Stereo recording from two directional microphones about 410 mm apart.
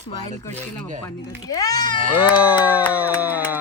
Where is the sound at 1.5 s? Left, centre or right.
Centre.